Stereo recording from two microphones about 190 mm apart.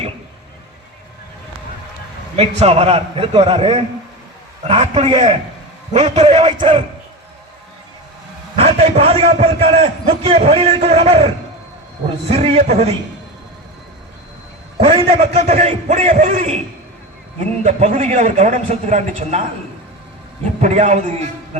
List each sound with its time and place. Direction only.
2.3 s a man's voice: 35° right (ahead or behind)
8.5 s a man's voice: 30° right (ahead or behind)
12.3 s a man's voice: 35° right (ahead or behind)
14.8 s a man's voice: 30° right (ahead or behind)
17.6 s a man's voice: 40° right (ahead or behind)
20.4 s a man's voice: 40° right (ahead or behind)